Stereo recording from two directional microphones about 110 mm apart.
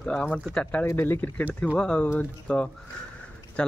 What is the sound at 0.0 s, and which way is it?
Speech, 10° left (ahead or behind).